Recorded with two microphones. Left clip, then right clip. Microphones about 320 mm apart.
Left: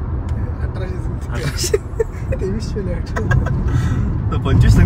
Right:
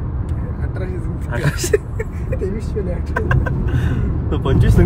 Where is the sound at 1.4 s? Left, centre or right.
Centre.